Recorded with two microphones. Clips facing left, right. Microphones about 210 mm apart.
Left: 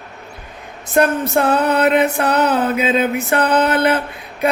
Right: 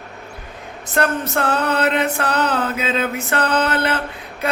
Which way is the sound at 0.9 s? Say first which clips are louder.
Left 5 dB; 15° left (ahead or behind).